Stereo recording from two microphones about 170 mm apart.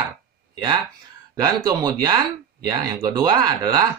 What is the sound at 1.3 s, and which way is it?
Speech, 20° right (ahead or behind).